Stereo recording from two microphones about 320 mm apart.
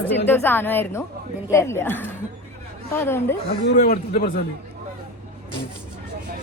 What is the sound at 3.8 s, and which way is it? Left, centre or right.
Speech, left.